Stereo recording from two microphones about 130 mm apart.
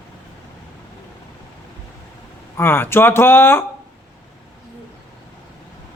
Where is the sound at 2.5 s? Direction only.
15° left (ahead or behind).